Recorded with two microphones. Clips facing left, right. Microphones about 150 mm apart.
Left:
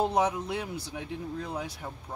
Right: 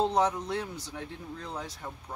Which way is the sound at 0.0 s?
10° left (ahead or behind).